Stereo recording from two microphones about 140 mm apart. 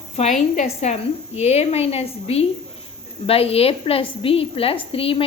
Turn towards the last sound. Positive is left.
turn(degrees=40)  # may be behind; listen again after turning